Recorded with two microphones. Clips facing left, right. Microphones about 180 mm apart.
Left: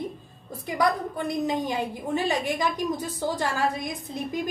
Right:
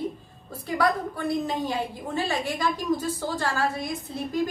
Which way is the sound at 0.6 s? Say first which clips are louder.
Even; 15° left (ahead or behind).